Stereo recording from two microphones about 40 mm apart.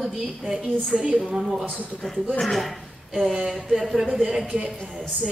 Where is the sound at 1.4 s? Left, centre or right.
Centre.